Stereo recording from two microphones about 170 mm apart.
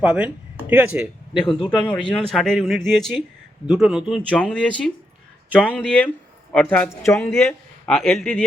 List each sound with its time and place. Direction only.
0.0 s speech: 10° right (ahead or behind)
1.4 s speech: 30° left (ahead or behind)
1.7 s speech: 5° left (ahead or behind)
4.3 s a man's voice: 5° left (ahead or behind)